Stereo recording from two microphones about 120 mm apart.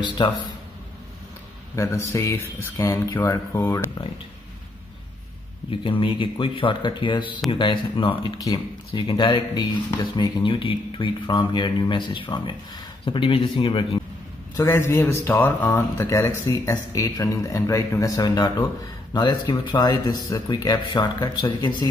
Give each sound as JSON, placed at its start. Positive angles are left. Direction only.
{"t": 0.2, "sound": "speech", "side_deg": 45}
{"t": 1.8, "sound": "speech", "side_deg": 25}
{"t": 5.7, "sound": "speech", "side_deg": 45}
{"t": 14.6, "sound": "speech", "side_deg": 20}